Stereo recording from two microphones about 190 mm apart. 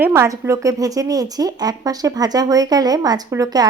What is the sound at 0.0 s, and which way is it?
Speech, 15° right (ahead or behind).